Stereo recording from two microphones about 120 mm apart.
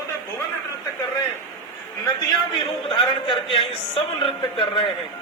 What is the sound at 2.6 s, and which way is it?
A man's voice, 45° left (ahead or behind).